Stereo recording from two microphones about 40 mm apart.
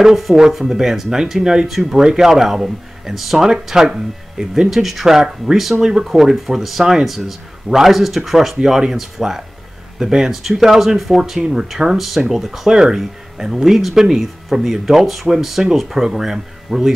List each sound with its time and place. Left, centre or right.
0.0 s speech: centre
1.7 s speech: centre
5.8 s speech: centre